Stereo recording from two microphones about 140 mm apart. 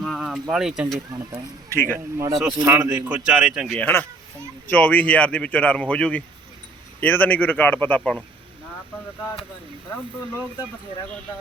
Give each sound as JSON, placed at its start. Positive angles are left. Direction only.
{"t": 0.0, "sound": "a sound", "side_deg": 0}
{"t": 0.5, "sound": "speech", "side_deg": -5}
{"t": 1.7, "sound": "a man's voice", "side_deg": 15}
{"t": 2.1, "sound": "a man's voice", "side_deg": -20}
{"t": 3.8, "sound": "a man's voice", "side_deg": 10}